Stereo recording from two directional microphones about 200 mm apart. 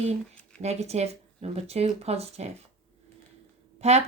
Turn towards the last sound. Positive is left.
turn(degrees=-35)  # may be behind; listen again after turning